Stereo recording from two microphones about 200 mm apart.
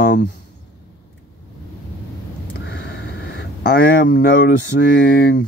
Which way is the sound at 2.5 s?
55° left (ahead or behind).